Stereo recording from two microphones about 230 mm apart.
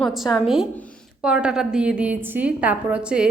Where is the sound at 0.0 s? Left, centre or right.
Centre.